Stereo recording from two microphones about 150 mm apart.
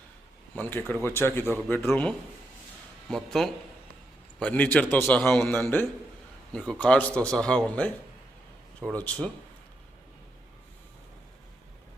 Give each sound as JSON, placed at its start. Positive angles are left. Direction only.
{"t": 0.5, "sound": "a man's voice", "side_deg": 15}
{"t": 3.1, "sound": "a man's voice", "side_deg": 0}
{"t": 6.5, "sound": "a man's voice", "side_deg": 5}